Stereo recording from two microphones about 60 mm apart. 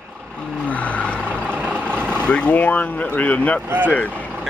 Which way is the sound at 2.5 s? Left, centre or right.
Left.